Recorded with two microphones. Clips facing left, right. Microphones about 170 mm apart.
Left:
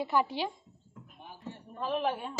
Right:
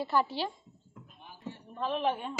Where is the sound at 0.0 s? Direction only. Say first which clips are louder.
Even; 15° left (ahead or behind).